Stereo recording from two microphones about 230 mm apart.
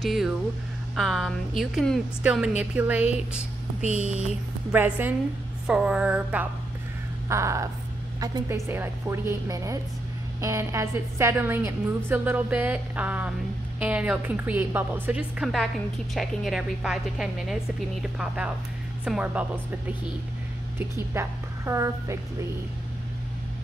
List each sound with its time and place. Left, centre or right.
0.0 s a woman's voice: centre
3.8 s speech: right
4.7 s a woman's voice: centre